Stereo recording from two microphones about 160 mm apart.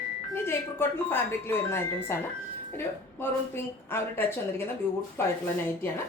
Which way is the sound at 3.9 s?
15° left (ahead or behind).